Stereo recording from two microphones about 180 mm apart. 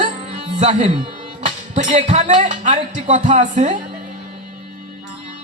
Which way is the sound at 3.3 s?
45° right (ahead or behind).